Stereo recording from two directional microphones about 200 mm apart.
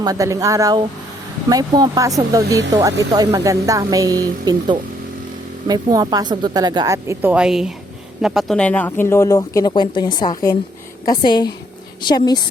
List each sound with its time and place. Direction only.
0.0 s a woman's voice: 15° right (ahead or behind); by 12.4 s 20° left (ahead or behind)